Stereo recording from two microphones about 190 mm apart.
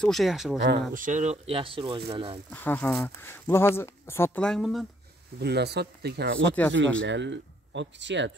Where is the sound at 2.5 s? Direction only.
10° left (ahead or behind).